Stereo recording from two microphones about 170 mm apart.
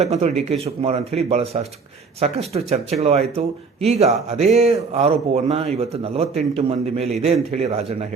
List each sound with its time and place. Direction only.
0.0 s speech: 40° right (ahead or behind)